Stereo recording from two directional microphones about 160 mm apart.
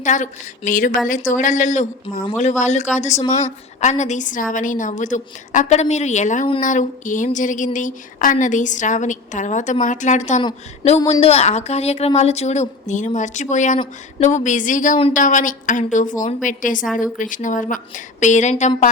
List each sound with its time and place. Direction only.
0.0 s a woman's voice: 50° left (ahead or behind)